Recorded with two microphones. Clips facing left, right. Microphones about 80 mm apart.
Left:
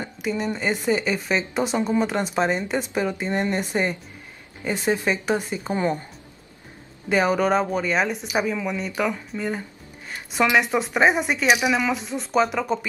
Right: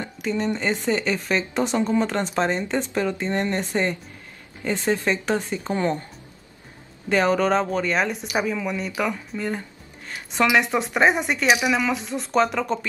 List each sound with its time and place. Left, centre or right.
0.0 s speech: centre
7.1 s speech: centre